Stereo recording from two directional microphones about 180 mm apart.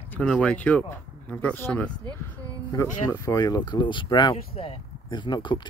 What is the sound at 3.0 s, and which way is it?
Speech, 20° left (ahead or behind).